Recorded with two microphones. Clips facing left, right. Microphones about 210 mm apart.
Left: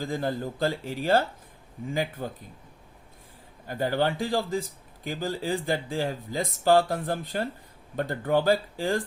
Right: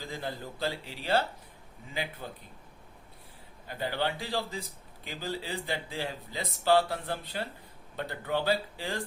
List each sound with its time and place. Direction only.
0.0 s a man's voice: 45° left (ahead or behind)
3.7 s a man's voice: 45° left (ahead or behind)